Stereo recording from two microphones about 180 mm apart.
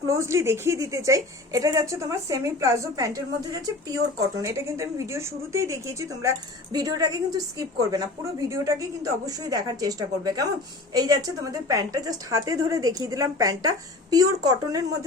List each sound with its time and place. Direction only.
0.1 s a woman's voice: 15° right (ahead or behind)